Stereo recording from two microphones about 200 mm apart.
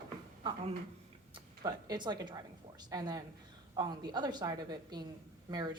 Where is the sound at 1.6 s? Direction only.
20° right (ahead or behind).